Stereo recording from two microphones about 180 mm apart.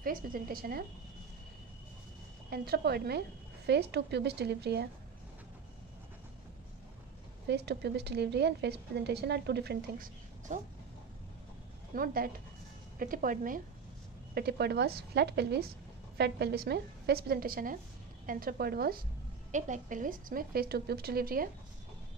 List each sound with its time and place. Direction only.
0.0 s a woman's voice: 50° right (ahead or behind)
2.5 s a woman's voice: 60° right (ahead or behind)
7.4 s a woman's voice: 65° right (ahead or behind)
10.5 s a woman's voice: 45° right (ahead or behind)
11.9 s a woman's voice: 55° right (ahead or behind)
14.3 s a woman's voice: 60° right (ahead or behind)
19.5 s a woman's voice: 45° right (ahead or behind)